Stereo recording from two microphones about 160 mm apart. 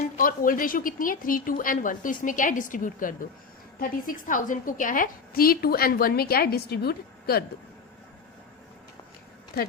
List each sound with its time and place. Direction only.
0.2 s a woman's voice: 60° left (ahead or behind); by 7.4 s 75° left (ahead or behind)